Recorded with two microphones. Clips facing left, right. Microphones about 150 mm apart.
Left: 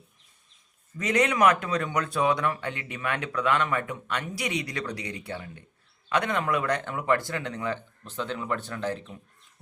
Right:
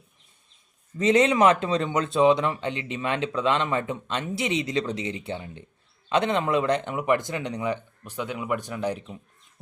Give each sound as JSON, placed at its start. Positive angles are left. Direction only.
{"t": 0.9, "sound": "speech", "side_deg": -25}